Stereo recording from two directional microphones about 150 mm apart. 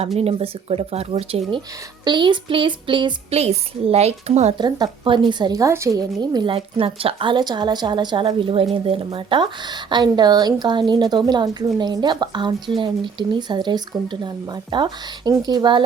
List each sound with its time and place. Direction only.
0.2 s a woman's voice: 40° right (ahead or behind)
3.3 s a woman's voice: 45° right (ahead or behind)
4.5 s a woman's voice: 30° right (ahead or behind)
6.3 s a woman's voice: 35° right (ahead or behind)